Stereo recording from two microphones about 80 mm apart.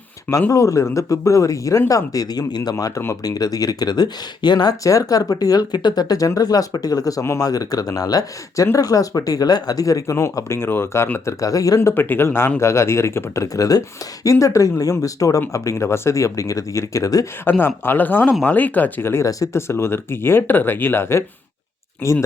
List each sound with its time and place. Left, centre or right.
0.5 s speech: left
4.8 s speech: left
11.3 s speech: left
11.9 s speech: left
17.4 s speech: left